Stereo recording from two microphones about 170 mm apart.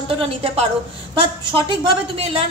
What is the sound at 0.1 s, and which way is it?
A woman's voice, 30° right (ahead or behind).